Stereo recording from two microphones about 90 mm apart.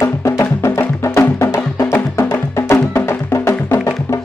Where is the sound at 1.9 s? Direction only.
25° left (ahead or behind).